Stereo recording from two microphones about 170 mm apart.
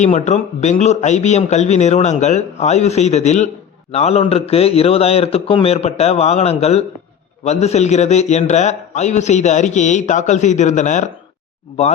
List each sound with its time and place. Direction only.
0.0 s a man's voice: 40° left (ahead or behind)